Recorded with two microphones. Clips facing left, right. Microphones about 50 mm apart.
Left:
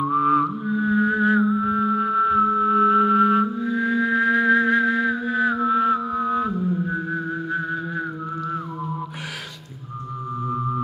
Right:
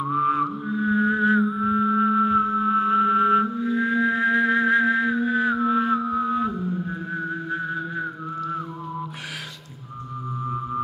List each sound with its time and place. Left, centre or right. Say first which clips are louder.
0.0 s music: left 3 dB; centre